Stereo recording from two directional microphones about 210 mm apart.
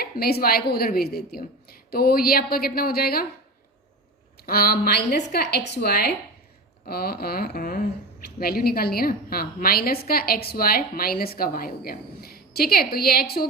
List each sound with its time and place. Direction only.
0.0 s speech: 50° left (ahead or behind)
4.4 s speech: 45° left (ahead or behind)